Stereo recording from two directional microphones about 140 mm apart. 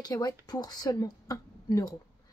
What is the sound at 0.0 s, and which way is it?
Speech, 25° left (ahead or behind).